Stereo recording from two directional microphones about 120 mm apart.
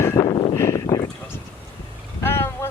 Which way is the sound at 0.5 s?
25° left (ahead or behind).